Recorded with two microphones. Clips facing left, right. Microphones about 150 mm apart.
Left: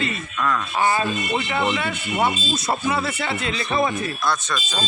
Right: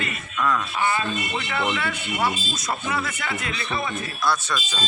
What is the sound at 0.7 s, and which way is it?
Speech, 40° left (ahead or behind).